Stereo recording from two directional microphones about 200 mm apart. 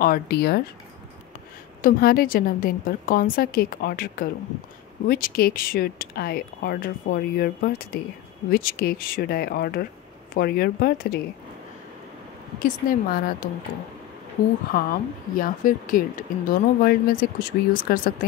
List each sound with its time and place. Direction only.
0.0 s speech: 50° left (ahead or behind)
1.8 s speech: 45° left (ahead or behind)
12.5 s speech: 45° left (ahead or behind)
14.7 s speech: 45° left (ahead or behind)